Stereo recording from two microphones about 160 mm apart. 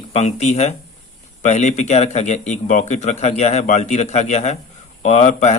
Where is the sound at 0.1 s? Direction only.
40° left (ahead or behind).